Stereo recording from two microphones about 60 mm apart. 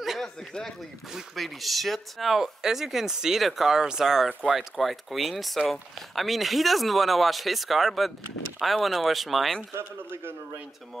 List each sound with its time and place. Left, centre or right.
0.2 s speech: centre
9.8 s a man's voice: right